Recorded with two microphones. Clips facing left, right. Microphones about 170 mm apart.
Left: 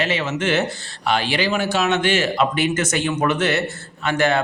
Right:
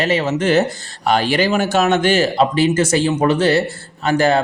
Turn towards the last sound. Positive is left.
turn(degrees=-35)  # may be behind; listen again after turning